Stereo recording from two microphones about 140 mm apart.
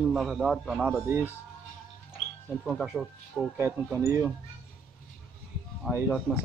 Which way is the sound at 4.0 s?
20° right (ahead or behind).